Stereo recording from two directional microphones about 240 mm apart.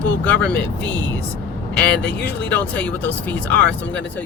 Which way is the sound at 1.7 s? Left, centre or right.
Left.